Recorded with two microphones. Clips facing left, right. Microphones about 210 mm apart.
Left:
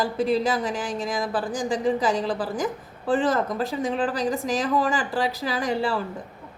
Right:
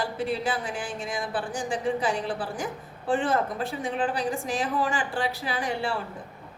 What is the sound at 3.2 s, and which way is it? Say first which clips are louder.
Speech: left 4 dB; 90° left.